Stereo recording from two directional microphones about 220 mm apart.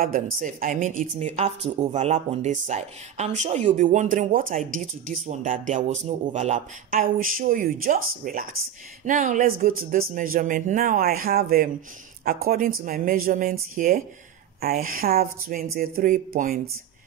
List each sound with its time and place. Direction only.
0.0 s a woman's voice: 40° right (ahead or behind)